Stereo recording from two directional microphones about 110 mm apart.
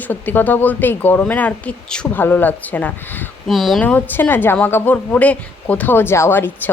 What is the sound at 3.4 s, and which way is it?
Speech, centre (ahead or behind).